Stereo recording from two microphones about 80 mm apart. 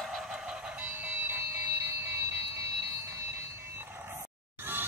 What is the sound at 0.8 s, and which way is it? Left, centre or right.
Alarm clock, right.